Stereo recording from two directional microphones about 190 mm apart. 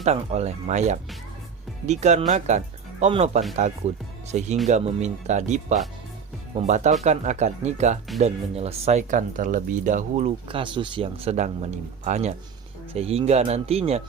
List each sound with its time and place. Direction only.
0.0 s speech: 35° right (ahead or behind)